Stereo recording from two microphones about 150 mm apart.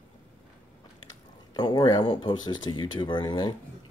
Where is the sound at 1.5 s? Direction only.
30° left (ahead or behind).